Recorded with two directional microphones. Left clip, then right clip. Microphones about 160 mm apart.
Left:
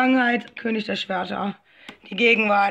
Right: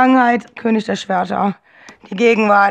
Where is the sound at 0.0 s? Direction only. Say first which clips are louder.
Right 8 dB; 45° right (ahead or behind).